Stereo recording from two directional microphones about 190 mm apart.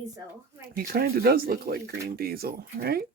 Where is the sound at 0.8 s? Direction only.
50° right (ahead or behind).